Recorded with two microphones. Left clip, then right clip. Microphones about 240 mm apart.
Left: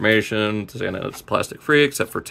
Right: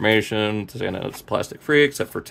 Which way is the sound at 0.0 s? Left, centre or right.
Centre.